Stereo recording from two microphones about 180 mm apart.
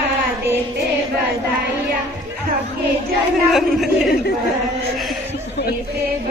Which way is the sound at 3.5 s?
Centre (ahead or behind).